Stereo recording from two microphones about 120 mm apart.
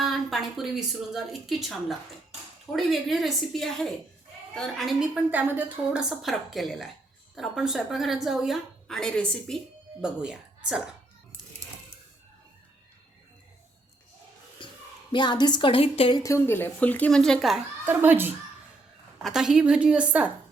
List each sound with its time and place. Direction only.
0.0 s a woman's voice: centre (ahead or behind)
5.3 s a woman's voice: 15° right (ahead or behind); by 9.6 s 5° left (ahead or behind)
10.0 s speech: 5° right (ahead or behind)
14.6 s a sound: 45° left (ahead or behind)
15.1 s a woman's voice: 40° left (ahead or behind)
16.1 s speech: 25° left (ahead or behind); by 17.6 s centre (ahead or behind)
17.8 s a woman's voice: 15° right (ahead or behind)
19.2 s a woman's voice: 5° right (ahead or behind)